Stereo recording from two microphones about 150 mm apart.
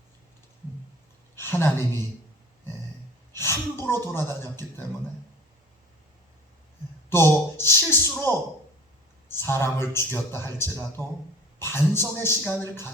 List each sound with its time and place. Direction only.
1.4 s speech: 15° left (ahead or behind)
3.8 s a man's voice: 15° left (ahead or behind)
7.1 s a man's voice: 15° left (ahead or behind)
9.3 s a man's voice: 15° left (ahead or behind)